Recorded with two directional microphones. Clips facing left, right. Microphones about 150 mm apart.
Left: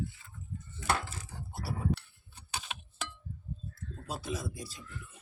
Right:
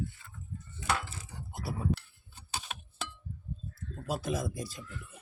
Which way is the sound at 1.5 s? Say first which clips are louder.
Right 1 dB; 15° right (ahead or behind).